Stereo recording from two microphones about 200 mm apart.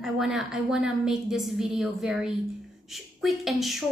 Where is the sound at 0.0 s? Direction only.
Centre (ahead or behind).